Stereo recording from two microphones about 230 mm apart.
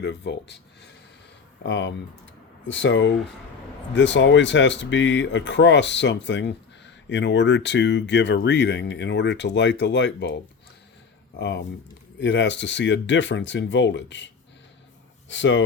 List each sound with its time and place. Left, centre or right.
0.0 s speech: left
11.3 s speech: left
15.3 s speech: left